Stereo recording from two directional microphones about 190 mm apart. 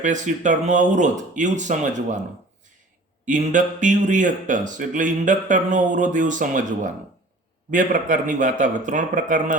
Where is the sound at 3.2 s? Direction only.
40° right (ahead or behind).